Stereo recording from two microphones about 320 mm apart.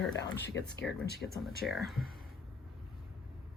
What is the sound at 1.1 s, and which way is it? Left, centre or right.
Speech, right.